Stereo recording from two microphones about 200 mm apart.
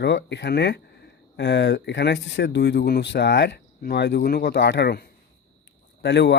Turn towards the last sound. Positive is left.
turn(degrees=60)  # may be behind; listen again after turning